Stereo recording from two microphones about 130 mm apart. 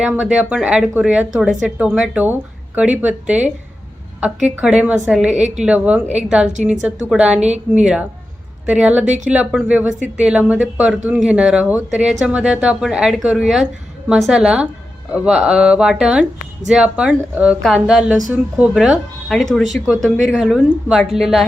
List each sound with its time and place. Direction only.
0.0 s speech: 10° right (ahead or behind)
6.1 s a woman's voice: 60° right (ahead or behind)
6.8 s speech: 10° right (ahead or behind)